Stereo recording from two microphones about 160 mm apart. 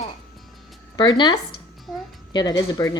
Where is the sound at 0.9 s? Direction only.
25° left (ahead or behind).